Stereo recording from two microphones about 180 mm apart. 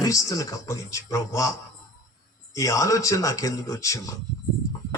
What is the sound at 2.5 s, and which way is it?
A man's voice, 15° left (ahead or behind).